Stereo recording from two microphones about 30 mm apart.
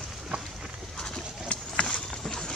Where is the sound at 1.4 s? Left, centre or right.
Left.